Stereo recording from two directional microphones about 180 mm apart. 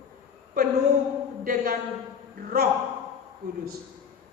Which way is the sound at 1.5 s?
55° right (ahead or behind).